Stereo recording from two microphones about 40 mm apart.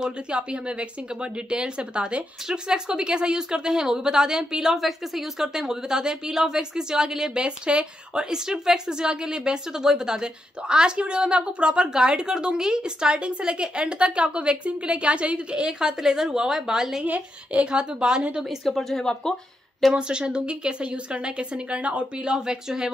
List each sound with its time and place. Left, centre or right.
0.0 s a woman's voice: right
7.3 s a woman's voice: right
17.0 s a woman's voice: right; by 18.6 s centre
18.6 s speech: centre
19.9 s a woman's voice: right